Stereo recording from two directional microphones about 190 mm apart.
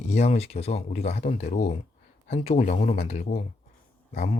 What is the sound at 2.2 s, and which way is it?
Speech, 35° left (ahead or behind).